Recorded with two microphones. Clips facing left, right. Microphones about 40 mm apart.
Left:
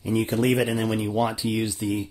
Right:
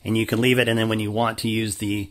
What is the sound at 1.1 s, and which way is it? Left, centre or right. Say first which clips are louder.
Speech: right 1 dB; right.